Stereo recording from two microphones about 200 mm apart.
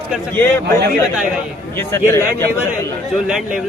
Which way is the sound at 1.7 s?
15° left (ahead or behind).